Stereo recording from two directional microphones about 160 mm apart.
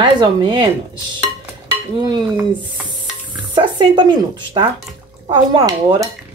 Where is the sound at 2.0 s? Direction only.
25° right (ahead or behind).